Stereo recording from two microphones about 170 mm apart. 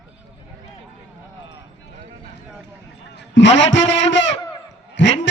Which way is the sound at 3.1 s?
90° left.